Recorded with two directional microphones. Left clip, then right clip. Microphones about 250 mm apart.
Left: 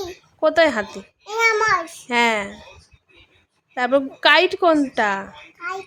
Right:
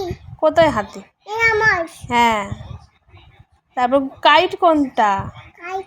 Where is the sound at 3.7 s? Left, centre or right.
Centre.